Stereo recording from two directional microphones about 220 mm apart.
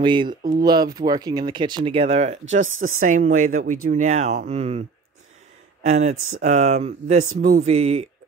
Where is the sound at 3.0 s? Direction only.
35° right (ahead or behind).